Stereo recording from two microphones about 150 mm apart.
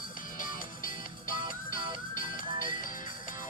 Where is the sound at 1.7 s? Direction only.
65° left (ahead or behind).